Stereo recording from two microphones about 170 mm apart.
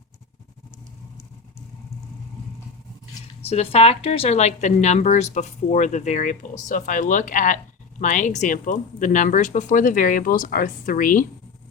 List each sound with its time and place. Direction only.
3.5 s speech: 35° left (ahead or behind); by 11.3 s 55° left (ahead or behind)